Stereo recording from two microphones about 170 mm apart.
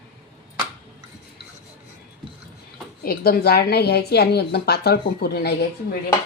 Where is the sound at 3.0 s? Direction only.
65° left (ahead or behind).